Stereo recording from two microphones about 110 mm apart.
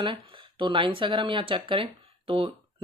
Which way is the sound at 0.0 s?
50° right (ahead or behind).